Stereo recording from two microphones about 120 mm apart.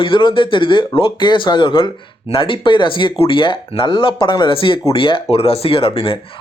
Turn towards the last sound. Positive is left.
turn(degrees=50)  # may be behind; listen again after turning